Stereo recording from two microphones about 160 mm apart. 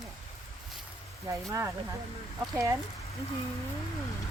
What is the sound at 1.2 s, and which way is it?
Speech, 20° right (ahead or behind).